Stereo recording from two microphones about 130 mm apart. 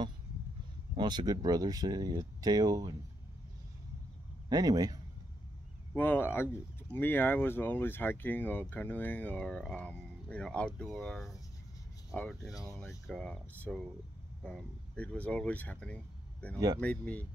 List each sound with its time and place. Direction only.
0.9 s speech: 35° right (ahead or behind)
4.5 s speech: 30° right (ahead or behind)
5.9 s speech: 15° left (ahead or behind)
13.0 s speech: 5° left (ahead or behind)
16.5 s speech: 30° right (ahead or behind)
16.8 s speech: 10° left (ahead or behind)